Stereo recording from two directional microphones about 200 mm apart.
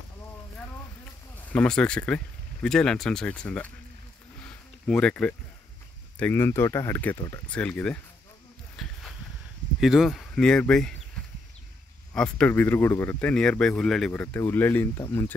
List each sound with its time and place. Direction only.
1.5 s speech: 5° left (ahead or behind)
4.5 s a sound: 5° left (ahead or behind)
6.1 s speech: 10° left (ahead or behind)
8.8 s a sound: centre (ahead or behind)
9.8 s speech: centre (ahead or behind)
12.1 s speech: 5° left (ahead or behind)